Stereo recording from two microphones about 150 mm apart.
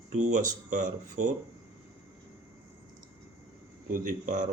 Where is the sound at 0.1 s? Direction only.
55° right (ahead or behind).